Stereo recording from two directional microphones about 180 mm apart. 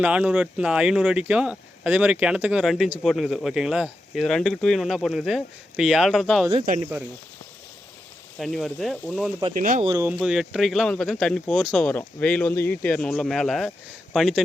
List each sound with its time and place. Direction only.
0.0 s speech: 5° right (ahead or behind)
8.4 s speech: centre (ahead or behind)
9.5 s speech: 45° right (ahead or behind)
9.8 s speech: 20° right (ahead or behind)
10.1 s speech: centre (ahead or behind)